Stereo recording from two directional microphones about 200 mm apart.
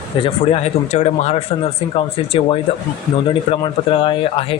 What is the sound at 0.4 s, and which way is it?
Speech, 30° left (ahead or behind).